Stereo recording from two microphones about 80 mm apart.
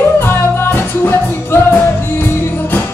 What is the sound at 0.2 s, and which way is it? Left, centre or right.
Music, left.